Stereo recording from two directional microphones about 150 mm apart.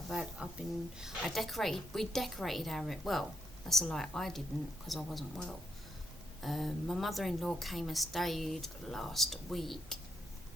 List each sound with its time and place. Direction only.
0.1 s a woman's voice: 5° right (ahead or behind)